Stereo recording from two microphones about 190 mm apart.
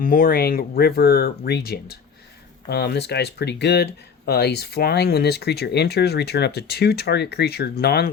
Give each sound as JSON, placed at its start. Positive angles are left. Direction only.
{"t": 0.0, "sound": "speech", "side_deg": 50}